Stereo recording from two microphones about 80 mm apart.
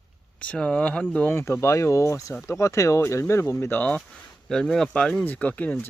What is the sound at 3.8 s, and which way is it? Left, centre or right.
Speech, centre.